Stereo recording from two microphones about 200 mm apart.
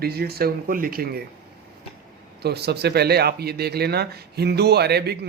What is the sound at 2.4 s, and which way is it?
A man's voice, 55° right (ahead or behind).